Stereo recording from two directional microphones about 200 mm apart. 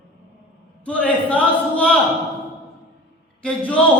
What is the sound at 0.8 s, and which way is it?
A man's voice, 5° left (ahead or behind).